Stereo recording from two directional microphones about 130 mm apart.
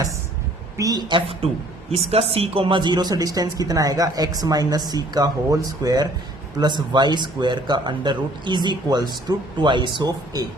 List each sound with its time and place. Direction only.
0.8 s speech: 30° right (ahead or behind)